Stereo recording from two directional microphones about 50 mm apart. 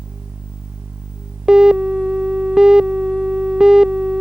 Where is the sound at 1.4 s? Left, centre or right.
Centre.